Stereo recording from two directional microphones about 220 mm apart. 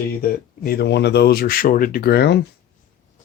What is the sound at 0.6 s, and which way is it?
Speech, 45° left (ahead or behind).